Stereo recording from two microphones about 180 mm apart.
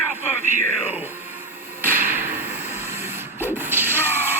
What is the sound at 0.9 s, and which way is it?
Speech, 10° right (ahead or behind).